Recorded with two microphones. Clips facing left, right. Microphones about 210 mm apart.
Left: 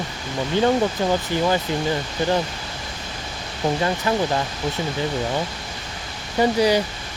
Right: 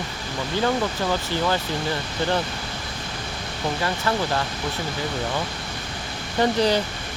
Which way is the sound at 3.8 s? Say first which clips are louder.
Left 1 dB; 15° left (ahead or behind).